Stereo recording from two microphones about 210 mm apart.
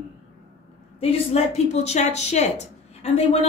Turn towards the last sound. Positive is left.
turn(degrees=30)  # may be behind; listen again after turning